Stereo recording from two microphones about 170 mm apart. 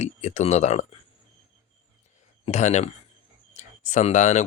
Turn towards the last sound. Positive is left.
turn(degrees=45)  # may be behind; listen again after turning